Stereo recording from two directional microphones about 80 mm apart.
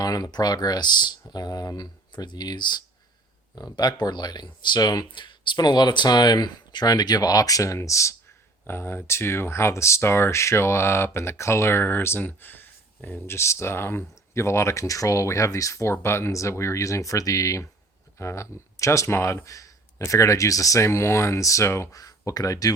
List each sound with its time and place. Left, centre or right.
0.0 s speech: left
3.5 s speech: left
22.0 s speech: left